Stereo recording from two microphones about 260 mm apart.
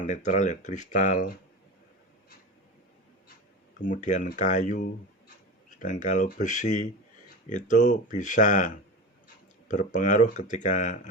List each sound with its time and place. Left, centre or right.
0.0 s speech: left
3.8 s speech: left
5.8 s speech: left